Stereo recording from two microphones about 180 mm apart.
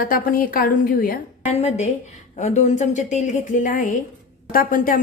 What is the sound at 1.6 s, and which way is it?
A woman's voice, 40° left (ahead or behind).